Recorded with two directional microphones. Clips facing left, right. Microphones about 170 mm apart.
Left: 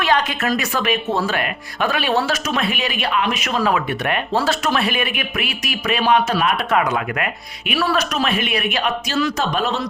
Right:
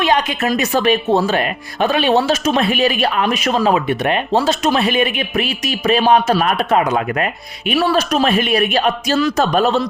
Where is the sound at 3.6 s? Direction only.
20° right (ahead or behind).